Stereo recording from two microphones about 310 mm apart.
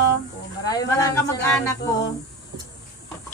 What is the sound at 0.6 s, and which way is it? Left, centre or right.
Speech, centre.